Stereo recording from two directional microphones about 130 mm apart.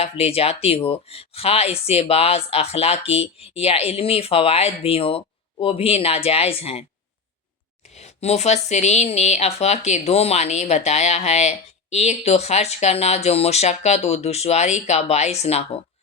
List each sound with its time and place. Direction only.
0.0 s speech: 50° left (ahead or behind)
7.9 s speech: 60° left (ahead or behind)